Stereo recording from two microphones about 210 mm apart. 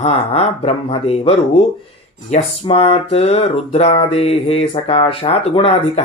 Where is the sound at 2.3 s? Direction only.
25° left (ahead or behind).